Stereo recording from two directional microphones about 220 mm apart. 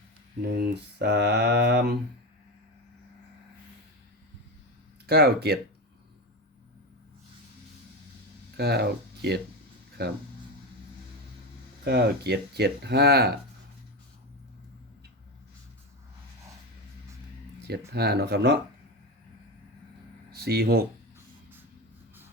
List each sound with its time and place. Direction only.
0.5 s speech: 50° right (ahead or behind)
5.0 s speech: 45° right (ahead or behind)
8.5 s speech: 45° right (ahead or behind)
11.9 s speech: 50° right (ahead or behind)
17.9 s speech: 45° right (ahead or behind)
20.3 s speech: 45° right (ahead or behind)